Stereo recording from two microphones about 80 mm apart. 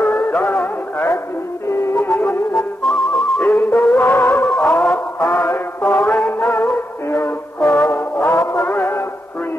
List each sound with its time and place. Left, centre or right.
0.0 s music: centre
1.7 s music: left
2.0 s music: left
2.5 s music: centre
3.3 s music: centre
4.5 s music: centre
7.1 s music: left
7.6 s music: centre